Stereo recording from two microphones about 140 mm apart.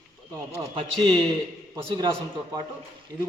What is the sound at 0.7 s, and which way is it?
A man's voice, 40° right (ahead or behind).